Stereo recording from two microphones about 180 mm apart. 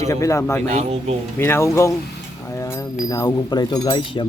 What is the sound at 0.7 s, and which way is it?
Speech, 35° right (ahead or behind).